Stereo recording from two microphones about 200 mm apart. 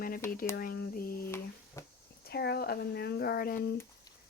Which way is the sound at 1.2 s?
10° left (ahead or behind).